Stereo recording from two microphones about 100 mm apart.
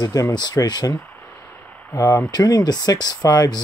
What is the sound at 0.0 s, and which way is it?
Speech, 40° left (ahead or behind).